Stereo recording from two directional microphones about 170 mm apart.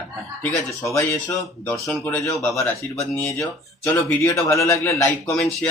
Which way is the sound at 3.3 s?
15° left (ahead or behind).